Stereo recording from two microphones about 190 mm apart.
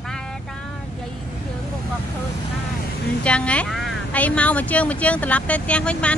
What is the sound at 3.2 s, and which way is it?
Speech, 5° left (ahead or behind).